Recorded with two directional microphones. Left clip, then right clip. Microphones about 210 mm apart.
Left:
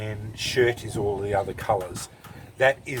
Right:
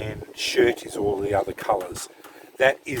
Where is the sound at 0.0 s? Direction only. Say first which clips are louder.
Right 3 dB; 40° right (ahead or behind).